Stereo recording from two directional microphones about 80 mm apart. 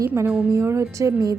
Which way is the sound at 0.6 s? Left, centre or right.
Right.